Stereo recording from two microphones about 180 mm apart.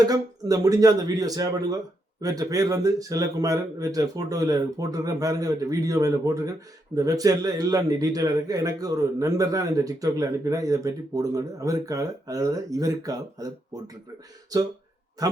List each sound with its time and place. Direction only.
0.0 s a man's voice: 20° right (ahead or behind)